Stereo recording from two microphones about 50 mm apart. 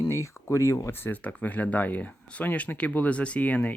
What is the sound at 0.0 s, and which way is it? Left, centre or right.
Speech, left.